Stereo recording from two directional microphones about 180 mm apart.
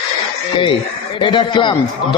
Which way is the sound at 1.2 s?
25° left (ahead or behind).